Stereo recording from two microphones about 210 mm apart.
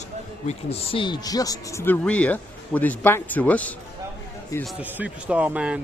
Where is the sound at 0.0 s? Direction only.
30° left (ahead or behind); by 3.8 s 5° left (ahead or behind).